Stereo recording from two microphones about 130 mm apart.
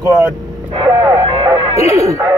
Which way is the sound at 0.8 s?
20° right (ahead or behind).